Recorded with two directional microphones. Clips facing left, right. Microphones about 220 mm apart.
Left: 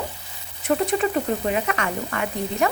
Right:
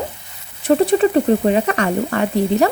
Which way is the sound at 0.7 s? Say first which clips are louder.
Right 8 dB; 35° right (ahead or behind).